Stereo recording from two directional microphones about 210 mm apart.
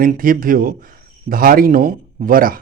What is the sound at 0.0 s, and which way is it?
Speech, 40° right (ahead or behind).